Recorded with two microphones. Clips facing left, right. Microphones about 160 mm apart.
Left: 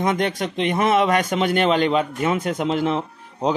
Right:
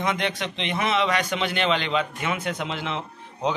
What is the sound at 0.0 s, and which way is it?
Speech, 45° left (ahead or behind).